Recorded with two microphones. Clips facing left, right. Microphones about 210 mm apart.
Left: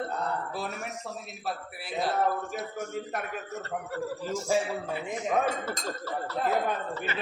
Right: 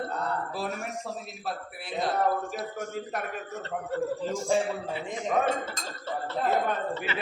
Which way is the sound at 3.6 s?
25° right (ahead or behind).